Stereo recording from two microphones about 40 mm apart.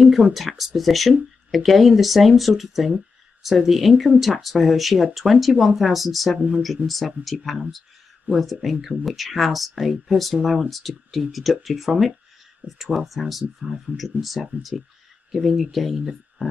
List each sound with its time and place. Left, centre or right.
0.0 s speech: centre
6.8 s speech: right
7.3 s speech: centre
8.3 s speech: right
8.6 s speech: centre